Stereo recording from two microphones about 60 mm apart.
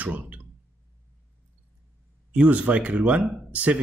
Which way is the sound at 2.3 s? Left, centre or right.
Centre.